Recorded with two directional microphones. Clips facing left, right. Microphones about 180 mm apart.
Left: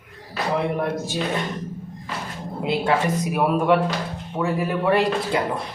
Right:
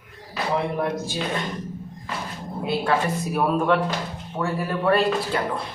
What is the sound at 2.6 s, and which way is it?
Speech, 20° left (ahead or behind).